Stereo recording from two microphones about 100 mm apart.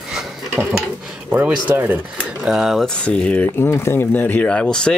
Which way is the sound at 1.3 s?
15° right (ahead or behind).